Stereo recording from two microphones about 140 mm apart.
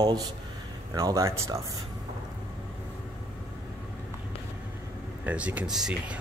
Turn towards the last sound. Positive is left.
turn(degrees=-5)  # may be behind; listen again after turning